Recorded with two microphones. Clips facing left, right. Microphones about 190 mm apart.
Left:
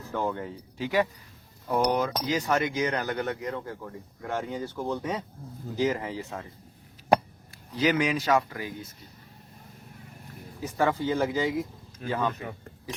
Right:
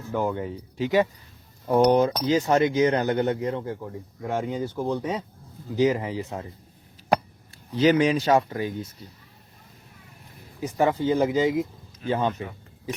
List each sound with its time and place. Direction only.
0.1 s speech: 15° right (ahead or behind)
7.8 s speech: 30° right (ahead or behind)
10.6 s speech: 20° right (ahead or behind)